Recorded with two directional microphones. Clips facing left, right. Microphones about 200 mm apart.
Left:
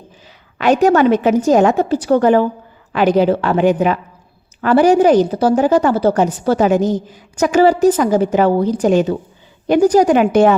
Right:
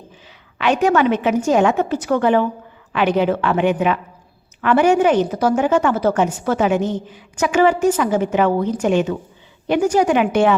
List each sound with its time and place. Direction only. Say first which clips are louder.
0.6 s a woman's voice: left 4 dB; 40° left (ahead or behind)